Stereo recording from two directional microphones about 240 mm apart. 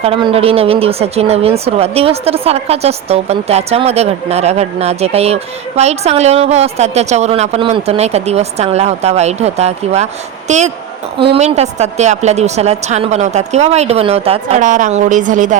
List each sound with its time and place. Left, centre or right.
0.0 s a woman's voice: right